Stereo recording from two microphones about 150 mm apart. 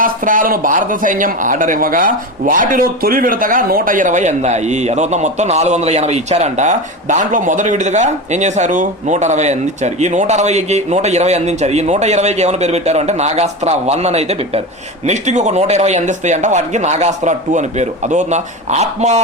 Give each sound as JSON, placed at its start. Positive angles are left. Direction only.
{"t": 0.0, "sound": "a man's voice", "side_deg": -65}